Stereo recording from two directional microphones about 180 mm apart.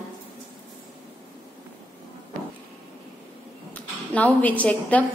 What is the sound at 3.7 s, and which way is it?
A woman's voice, 10° left (ahead or behind).